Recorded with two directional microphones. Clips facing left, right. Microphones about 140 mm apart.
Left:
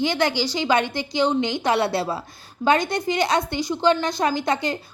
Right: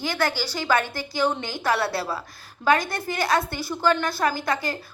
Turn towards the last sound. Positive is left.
turn(degrees=20)  # may be behind; listen again after turning